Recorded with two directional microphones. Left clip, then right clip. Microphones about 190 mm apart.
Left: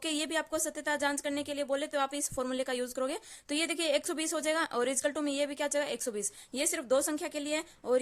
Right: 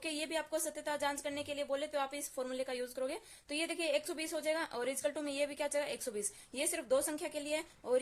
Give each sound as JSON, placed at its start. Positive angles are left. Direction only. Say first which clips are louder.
{"t": 0.0, "sound": "speech", "louder": "left 5 dB", "side_deg": 40}